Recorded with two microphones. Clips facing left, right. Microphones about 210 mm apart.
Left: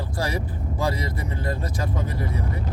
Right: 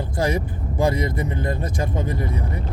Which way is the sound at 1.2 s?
20° right (ahead or behind).